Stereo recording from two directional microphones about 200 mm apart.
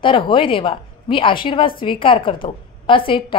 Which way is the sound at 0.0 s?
25° left (ahead or behind).